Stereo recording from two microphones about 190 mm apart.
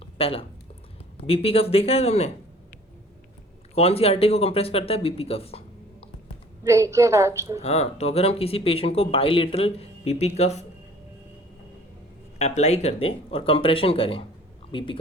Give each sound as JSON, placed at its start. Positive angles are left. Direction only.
{"t": 0.0, "sound": "a sound", "side_deg": 30}
{"t": 1.3, "sound": "speech", "side_deg": 30}
{"t": 3.8, "sound": "speech", "side_deg": 30}
{"t": 6.7, "sound": "a woman's voice", "side_deg": -15}
{"t": 7.6, "sound": "speech", "side_deg": 35}
{"t": 12.4, "sound": "speech", "side_deg": 35}